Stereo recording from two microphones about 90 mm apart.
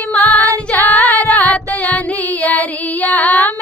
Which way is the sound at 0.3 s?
40° right (ahead or behind).